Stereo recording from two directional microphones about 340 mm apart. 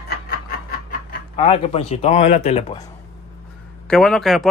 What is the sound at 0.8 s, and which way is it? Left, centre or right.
Speech, centre.